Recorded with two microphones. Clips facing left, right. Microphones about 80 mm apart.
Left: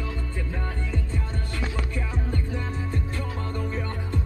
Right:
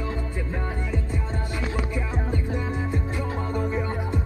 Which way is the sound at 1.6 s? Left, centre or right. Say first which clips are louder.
Right 2 dB; centre.